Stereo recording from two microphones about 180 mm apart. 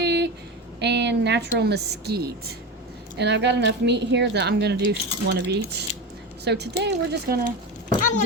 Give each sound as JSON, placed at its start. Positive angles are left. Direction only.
{"t": 0.0, "sound": "a sound", "side_deg": -70}
{"t": 0.8, "sound": "a woman's voice", "side_deg": -70}
{"t": 3.2, "sound": "a woman's voice", "side_deg": -75}